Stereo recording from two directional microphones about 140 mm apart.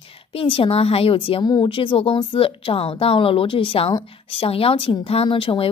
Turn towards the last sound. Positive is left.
turn(degrees=40)  # may be behind; listen again after turning